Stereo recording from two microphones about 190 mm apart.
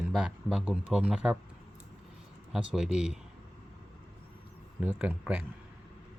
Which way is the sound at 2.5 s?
5° right (ahead or behind).